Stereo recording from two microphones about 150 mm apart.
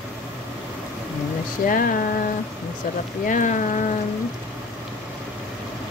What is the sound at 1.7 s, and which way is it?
Speech, 65° left (ahead or behind).